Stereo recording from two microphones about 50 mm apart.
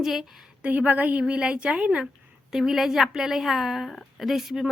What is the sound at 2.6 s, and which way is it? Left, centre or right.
A woman's voice, centre.